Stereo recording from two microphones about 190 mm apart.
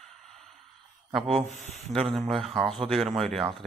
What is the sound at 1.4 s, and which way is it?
Speech, 40° left (ahead or behind).